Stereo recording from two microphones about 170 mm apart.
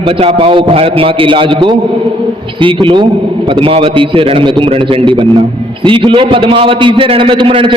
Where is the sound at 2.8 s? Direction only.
30° right (ahead or behind).